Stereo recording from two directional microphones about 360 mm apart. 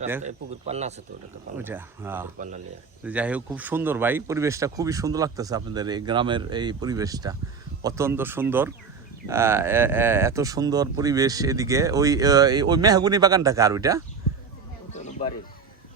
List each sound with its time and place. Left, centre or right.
0.3 s speech: centre
1.5 s speech: centre
14.9 s music: centre